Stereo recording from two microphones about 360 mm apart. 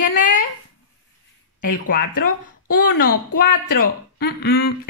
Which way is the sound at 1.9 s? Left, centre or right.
Left.